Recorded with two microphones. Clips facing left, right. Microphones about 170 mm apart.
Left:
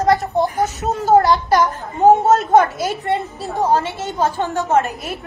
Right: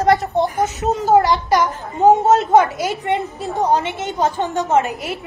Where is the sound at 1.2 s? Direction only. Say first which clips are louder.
Left 1 dB; 15° right (ahead or behind).